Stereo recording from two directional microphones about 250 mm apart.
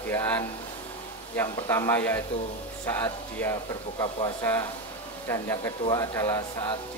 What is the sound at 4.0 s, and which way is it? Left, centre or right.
Speech, centre.